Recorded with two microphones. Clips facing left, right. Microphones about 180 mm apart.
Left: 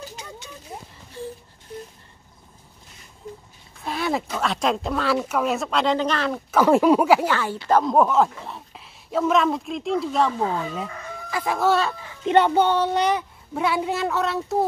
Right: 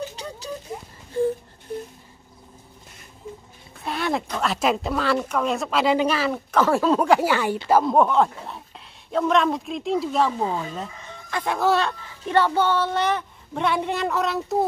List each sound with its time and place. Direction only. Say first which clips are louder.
0.1 s a sound: right 3 dB; 35° right (ahead or behind)
1.1 s wail: right 12 dB; 55° right (ahead or behind)
3.8 s speech: even; centre (ahead or behind)
6.5 s speech: left 4 dB; 15° left (ahead or behind)
7.2 s speech: right 2 dB; 15° right (ahead or behind)
12.3 s speech: left 3 dB; 20° left (ahead or behind)
13.5 s speech: even; 5° left (ahead or behind)